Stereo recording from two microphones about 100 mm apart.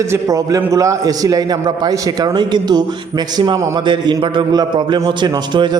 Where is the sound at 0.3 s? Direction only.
35° right (ahead or behind).